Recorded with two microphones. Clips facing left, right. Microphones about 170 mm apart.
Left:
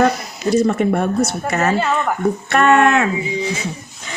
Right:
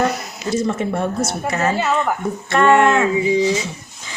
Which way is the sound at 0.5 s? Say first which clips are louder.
Left 5 dB; 60° left (ahead or behind).